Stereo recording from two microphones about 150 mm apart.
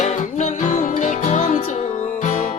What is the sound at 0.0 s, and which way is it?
Music, 55° left (ahead or behind).